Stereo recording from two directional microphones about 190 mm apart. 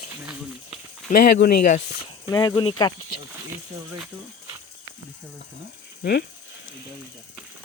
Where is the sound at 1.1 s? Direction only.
55° left (ahead or behind).